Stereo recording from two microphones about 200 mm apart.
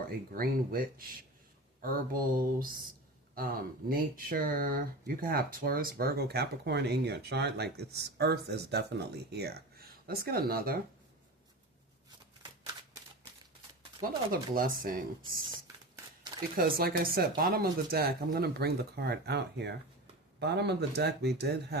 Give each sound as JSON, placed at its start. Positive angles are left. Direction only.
{"t": 0.3, "sound": "speech", "side_deg": -45}
{"t": 14.3, "sound": "speech", "side_deg": -45}
{"t": 15.2, "sound": "a sound", "side_deg": -20}
{"t": 16.6, "sound": "speech", "side_deg": -50}